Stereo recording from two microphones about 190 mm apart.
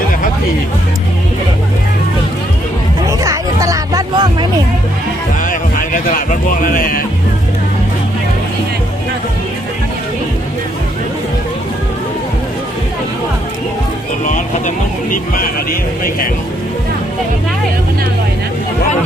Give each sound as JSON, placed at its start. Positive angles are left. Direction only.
{"t": 3.1, "sound": "music", "side_deg": -15}
{"t": 5.4, "sound": "music", "side_deg": 45}
{"t": 14.3, "sound": "music", "side_deg": 40}
{"t": 15.1, "sound": "a man's voice", "side_deg": 50}